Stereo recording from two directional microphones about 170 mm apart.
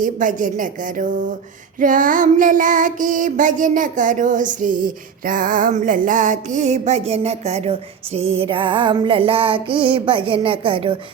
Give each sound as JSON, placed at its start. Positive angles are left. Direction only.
{"t": 0.0, "sound": "child singing", "side_deg": -50}